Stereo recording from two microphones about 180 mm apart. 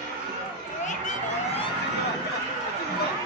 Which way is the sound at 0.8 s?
40° left (ahead or behind).